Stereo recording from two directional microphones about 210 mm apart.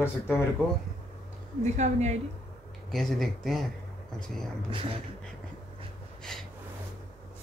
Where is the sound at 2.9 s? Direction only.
Centre (ahead or behind).